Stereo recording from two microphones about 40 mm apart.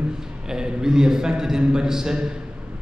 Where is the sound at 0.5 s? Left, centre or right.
Centre.